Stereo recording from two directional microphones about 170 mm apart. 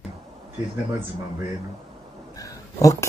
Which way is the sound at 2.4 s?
20° left (ahead or behind).